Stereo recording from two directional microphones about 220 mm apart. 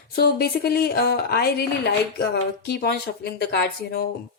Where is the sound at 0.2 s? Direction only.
45° left (ahead or behind).